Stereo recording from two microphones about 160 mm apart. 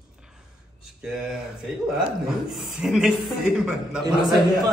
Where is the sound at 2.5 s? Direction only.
5° right (ahead or behind).